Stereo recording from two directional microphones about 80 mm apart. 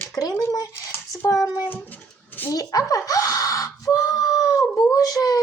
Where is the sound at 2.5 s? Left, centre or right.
Left.